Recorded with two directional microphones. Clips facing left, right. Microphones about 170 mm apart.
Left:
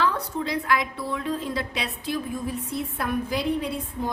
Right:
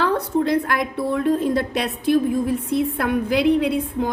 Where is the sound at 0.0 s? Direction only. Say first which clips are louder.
Right 6 dB; 55° right (ahead or behind).